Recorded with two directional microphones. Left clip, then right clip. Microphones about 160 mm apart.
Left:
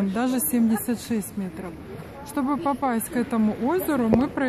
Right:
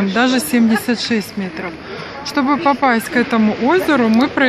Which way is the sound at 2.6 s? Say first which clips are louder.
Right 11 dB; 10° left (ahead or behind).